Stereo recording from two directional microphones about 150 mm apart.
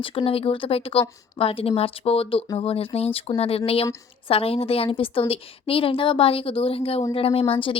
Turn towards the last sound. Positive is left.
turn(degrees=40)  # may be behind; listen again after turning